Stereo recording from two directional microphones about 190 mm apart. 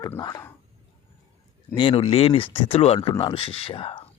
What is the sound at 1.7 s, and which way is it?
Speech, 25° left (ahead or behind).